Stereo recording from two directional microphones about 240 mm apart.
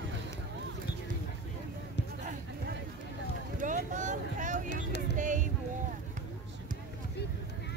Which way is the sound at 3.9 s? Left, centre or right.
Right.